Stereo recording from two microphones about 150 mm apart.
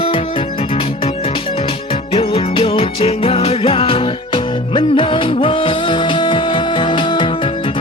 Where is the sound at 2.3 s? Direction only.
35° left (ahead or behind).